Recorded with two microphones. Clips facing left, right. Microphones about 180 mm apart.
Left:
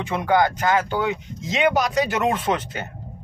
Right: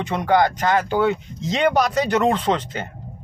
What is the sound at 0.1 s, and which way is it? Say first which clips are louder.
Speech: right 1 dB; 5° left (ahead or behind).